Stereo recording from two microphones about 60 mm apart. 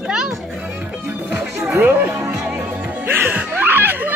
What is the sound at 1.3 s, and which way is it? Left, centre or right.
Music, centre.